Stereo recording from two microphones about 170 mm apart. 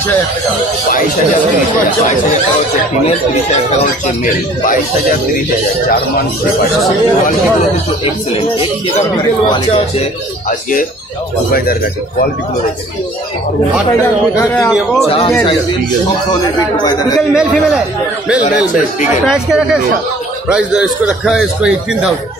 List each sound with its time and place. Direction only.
8.0 s speech: 35° left (ahead or behind)
14.0 s speech: 15° left (ahead or behind)
14.7 s speech: 5° right (ahead or behind)
15.0 s speech: 35° left (ahead or behind)
17.3 s speech: 5° right (ahead or behind)
19.2 s speech: 5° right (ahead or behind)